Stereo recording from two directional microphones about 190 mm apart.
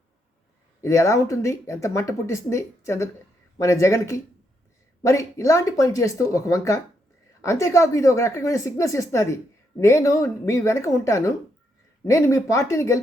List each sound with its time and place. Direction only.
0.8 s speech: 15° left (ahead or behind)